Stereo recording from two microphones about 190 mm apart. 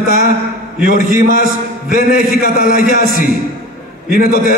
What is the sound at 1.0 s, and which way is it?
A man's voice, 45° left (ahead or behind).